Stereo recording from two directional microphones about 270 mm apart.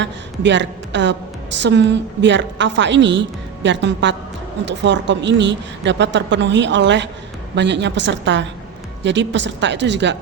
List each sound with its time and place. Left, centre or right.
0.0 s a woman's voice: right